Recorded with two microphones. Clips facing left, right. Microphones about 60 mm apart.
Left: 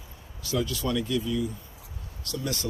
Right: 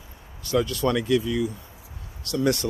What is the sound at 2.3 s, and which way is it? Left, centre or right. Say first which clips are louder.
Speech: right 10 dB; right.